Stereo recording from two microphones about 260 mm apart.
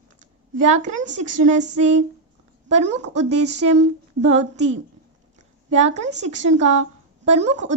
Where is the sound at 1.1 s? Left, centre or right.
Right.